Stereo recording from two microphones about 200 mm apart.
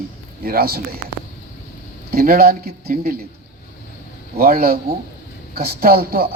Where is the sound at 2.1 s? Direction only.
50° right (ahead or behind).